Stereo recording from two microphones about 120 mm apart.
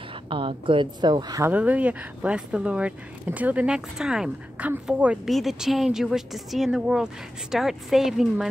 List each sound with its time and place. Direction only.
0.1 s speech: 45° right (ahead or behind)
1.4 s speech: 15° right (ahead or behind)